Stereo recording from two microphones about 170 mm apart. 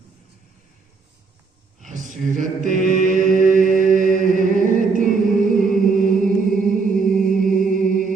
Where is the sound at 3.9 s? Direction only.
50° right (ahead or behind).